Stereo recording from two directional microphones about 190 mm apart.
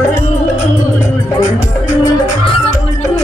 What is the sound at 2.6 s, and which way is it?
Music, 35° left (ahead or behind).